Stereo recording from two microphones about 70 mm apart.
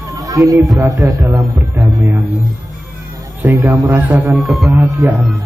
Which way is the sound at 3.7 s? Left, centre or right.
Right.